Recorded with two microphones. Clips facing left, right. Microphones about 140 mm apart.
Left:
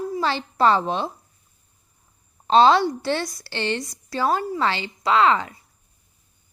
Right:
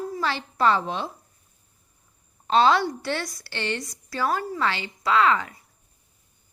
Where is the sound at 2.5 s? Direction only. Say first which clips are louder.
Left 4 dB; 30° left (ahead or behind).